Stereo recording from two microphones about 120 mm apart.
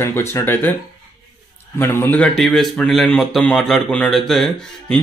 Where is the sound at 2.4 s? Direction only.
5° left (ahead or behind).